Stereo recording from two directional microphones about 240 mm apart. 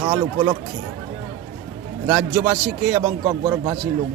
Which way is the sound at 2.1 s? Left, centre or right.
Centre.